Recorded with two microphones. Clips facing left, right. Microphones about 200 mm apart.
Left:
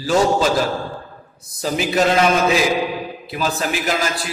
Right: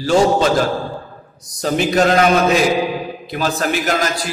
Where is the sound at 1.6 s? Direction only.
Centre (ahead or behind).